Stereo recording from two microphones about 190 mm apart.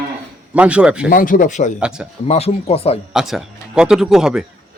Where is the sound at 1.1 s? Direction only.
45° left (ahead or behind).